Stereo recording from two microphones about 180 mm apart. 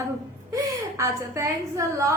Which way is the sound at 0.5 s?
20° right (ahead or behind).